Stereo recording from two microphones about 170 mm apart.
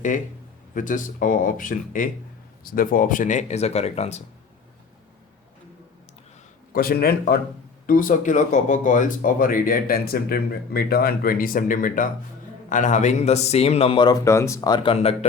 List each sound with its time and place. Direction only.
0.7 s speech: 50° left (ahead or behind)
6.7 s speech: 65° left (ahead or behind)
7.9 s a man's voice: 55° left (ahead or behind); by 14.2 s 30° left (ahead or behind)
14.3 s speech: 15° left (ahead or behind)
14.9 s a man's voice: 40° left (ahead or behind)